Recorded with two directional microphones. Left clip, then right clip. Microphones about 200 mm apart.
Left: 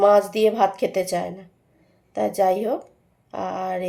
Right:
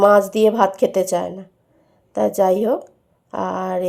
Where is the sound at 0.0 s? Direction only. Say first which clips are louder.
Right 3 dB; 25° right (ahead or behind).